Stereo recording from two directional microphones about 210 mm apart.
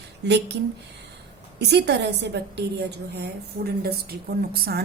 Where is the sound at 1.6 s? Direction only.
55° right (ahead or behind).